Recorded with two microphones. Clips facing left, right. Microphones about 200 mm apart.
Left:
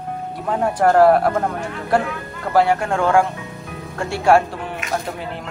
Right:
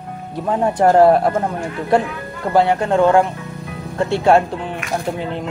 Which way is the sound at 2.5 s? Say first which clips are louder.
Right 2 dB; 25° right (ahead or behind).